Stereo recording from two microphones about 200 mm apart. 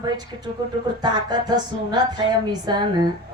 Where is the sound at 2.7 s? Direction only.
20° right (ahead or behind).